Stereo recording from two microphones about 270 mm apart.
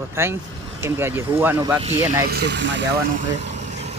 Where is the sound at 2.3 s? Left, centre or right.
Right.